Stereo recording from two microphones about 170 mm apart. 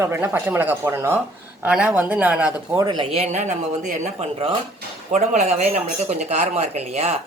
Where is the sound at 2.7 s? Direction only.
25° right (ahead or behind).